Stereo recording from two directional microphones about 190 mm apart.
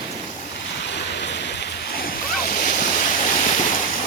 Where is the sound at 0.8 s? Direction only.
65° left (ahead or behind).